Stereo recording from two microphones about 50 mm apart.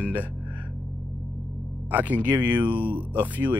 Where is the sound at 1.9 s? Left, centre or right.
Right.